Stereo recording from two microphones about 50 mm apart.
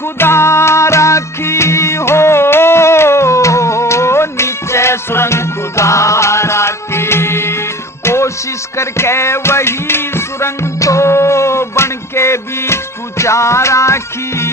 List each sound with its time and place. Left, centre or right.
0.2 s music: left